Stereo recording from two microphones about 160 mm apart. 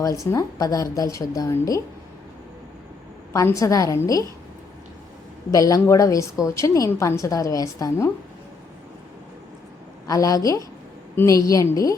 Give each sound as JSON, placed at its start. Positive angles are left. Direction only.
{"t": 0.3, "sound": "a woman's voice", "side_deg": 20}
{"t": 3.3, "sound": "a woman's voice", "side_deg": 20}
{"t": 5.5, "sound": "a woman's voice", "side_deg": 20}
{"t": 10.1, "sound": "a woman's voice", "side_deg": 20}